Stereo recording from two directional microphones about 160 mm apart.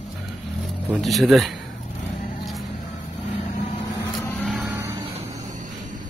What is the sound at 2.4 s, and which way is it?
Vehicle, centre (ahead or behind).